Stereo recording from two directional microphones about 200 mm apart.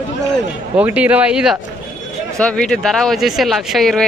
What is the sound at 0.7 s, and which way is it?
A man's voice, 5° right (ahead or behind).